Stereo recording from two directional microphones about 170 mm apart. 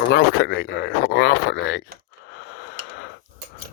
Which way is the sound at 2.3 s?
90° left.